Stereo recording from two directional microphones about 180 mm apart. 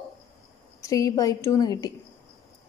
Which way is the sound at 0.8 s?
20° left (ahead or behind).